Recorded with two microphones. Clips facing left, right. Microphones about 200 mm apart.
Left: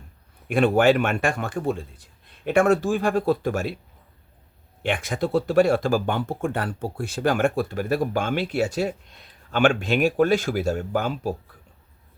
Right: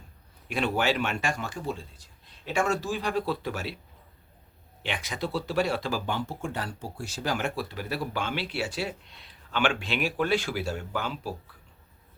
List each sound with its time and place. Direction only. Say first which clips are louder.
0.4 s speech: left 9 dB; 50° left (ahead or behind)
4.8 s speech: left 8 dB; 50° left (ahead or behind)